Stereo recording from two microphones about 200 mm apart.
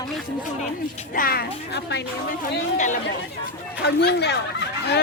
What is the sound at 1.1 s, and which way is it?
Speech, 45° left (ahead or behind).